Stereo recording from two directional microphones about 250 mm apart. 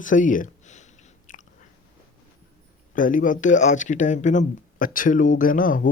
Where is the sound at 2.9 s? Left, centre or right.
Left.